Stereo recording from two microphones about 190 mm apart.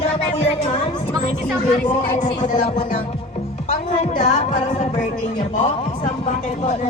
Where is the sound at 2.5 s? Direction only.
40° left (ahead or behind).